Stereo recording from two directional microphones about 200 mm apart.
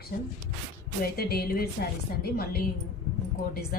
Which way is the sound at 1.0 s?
50° left (ahead or behind).